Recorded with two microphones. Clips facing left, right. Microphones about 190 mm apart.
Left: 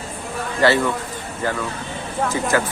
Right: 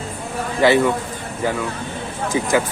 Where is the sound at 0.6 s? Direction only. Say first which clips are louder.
Right 3 dB; 15° right (ahead or behind).